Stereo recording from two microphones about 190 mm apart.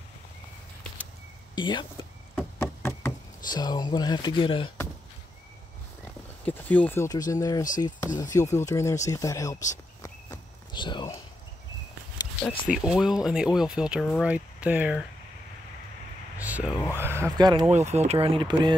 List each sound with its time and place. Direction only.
1.5 s speech: 25° left (ahead or behind)
2.6 s speech: 10° left (ahead or behind)
6.4 s speech: 10° left (ahead or behind)
10.0 s walk: 20° left (ahead or behind)
12.4 s speech: 5° right (ahead or behind)
16.4 s a sound: 10° right (ahead or behind)
16.9 s speech: 15° right (ahead or behind)
17.6 s speech: 35° right (ahead or behind)